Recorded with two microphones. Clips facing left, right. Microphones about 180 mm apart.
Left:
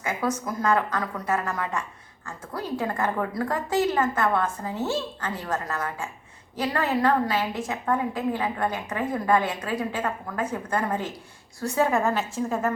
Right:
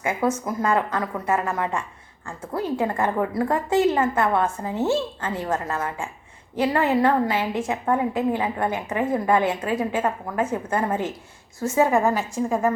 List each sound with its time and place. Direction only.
0.0 s a woman's voice: 25° right (ahead or behind)